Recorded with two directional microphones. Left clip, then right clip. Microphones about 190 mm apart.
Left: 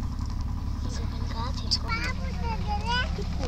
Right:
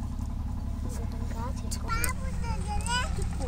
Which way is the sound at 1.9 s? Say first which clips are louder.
Left 2 dB; 25° left (ahead or behind).